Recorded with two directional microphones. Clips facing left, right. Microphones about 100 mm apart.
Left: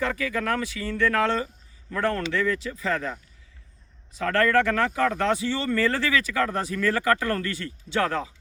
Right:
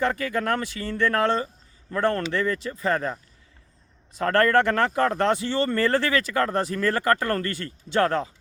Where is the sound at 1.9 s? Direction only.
30° right (ahead or behind).